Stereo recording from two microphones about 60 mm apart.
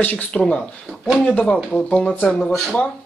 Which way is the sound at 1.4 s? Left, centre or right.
Centre.